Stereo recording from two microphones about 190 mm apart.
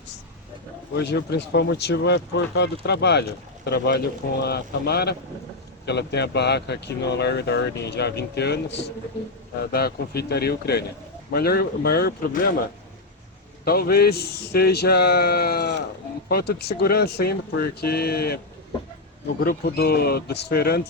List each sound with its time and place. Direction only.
0.9 s speech: 60° left (ahead or behind)
13.7 s speech: 55° left (ahead or behind)
19.4 s speech: 55° left (ahead or behind)